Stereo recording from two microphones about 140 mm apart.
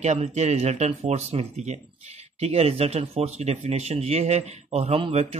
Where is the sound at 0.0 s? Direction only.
50° right (ahead or behind).